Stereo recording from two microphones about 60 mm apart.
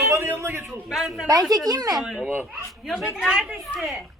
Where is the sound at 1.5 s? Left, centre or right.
Right.